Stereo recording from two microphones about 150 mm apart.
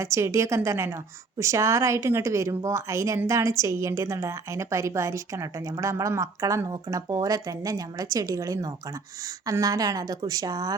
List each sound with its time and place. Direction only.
0.0 s speech: 20° right (ahead or behind)